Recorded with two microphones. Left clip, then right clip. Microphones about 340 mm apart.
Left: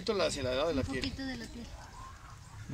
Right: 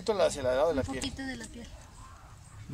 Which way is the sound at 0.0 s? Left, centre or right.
Right.